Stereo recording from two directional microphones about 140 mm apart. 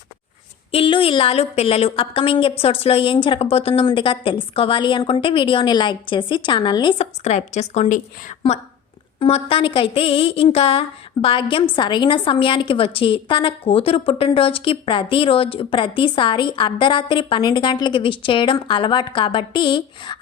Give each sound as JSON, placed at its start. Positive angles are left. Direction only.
{"t": 0.7, "sound": "a woman's voice", "side_deg": 40}
{"t": 7.0, "sound": "a woman's voice", "side_deg": 50}
{"t": 9.1, "sound": "a woman's voice", "side_deg": 45}